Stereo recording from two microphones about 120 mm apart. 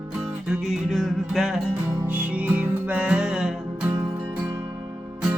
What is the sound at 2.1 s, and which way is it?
Music, 10° right (ahead or behind).